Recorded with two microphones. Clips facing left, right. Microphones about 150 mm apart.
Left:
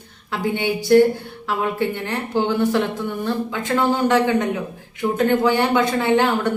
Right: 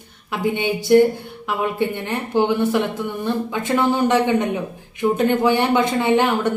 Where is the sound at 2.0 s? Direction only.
15° right (ahead or behind).